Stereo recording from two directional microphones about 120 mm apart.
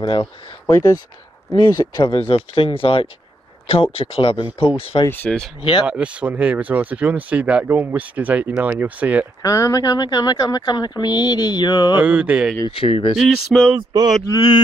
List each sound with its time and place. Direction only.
0.0 s speech: 45° left (ahead or behind)
1.6 s speech: 35° left (ahead or behind)
5.0 s speech: 15° left (ahead or behind)
5.6 s speech: 45° left (ahead or behind)
5.9 s speech: 10° right (ahead or behind)
9.4 s speech: 25° left (ahead or behind)
12.0 s speech: 15° right (ahead or behind)
12.6 s speech: 50° left (ahead or behind)
13.1 s speech: centre (ahead or behind)
13.7 s a sound: 35° right (ahead or behind)
14.2 s speech: 35° left (ahead or behind)